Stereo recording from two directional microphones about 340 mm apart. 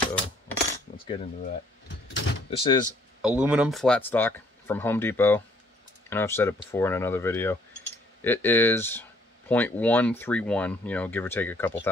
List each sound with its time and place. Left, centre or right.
1.0 s speech: left
3.2 s speech: centre